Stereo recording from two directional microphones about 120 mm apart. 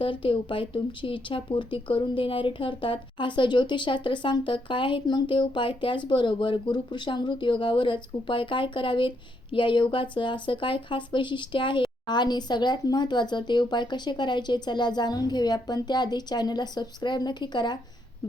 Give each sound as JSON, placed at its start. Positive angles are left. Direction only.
{"t": 0.0, "sound": "speech", "side_deg": 45}